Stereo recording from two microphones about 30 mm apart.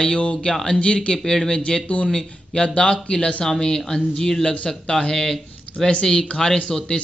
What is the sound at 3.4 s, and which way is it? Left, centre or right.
A man's voice, left.